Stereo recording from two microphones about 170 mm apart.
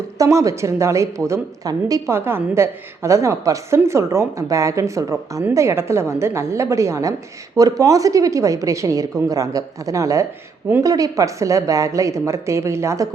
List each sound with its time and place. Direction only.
0.2 s a woman's voice: 20° right (ahead or behind)